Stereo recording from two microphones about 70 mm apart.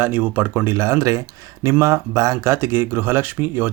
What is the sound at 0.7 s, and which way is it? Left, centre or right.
Speech, right.